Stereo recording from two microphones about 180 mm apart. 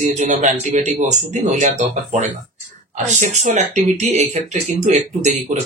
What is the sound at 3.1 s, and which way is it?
Speech, 40° right (ahead or behind).